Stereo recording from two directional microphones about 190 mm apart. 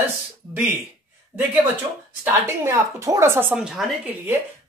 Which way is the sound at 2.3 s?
15° right (ahead or behind).